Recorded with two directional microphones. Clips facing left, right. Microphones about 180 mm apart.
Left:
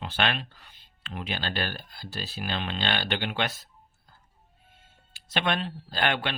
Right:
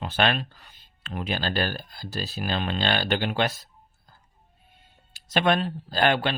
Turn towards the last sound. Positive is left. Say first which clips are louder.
# right 5 dB
turn(degrees=-35)  # may be behind; listen again after turning